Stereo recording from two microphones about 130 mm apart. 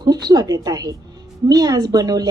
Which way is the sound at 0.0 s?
30° right (ahead or behind).